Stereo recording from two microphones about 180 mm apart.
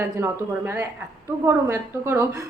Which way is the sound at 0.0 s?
15° right (ahead or behind).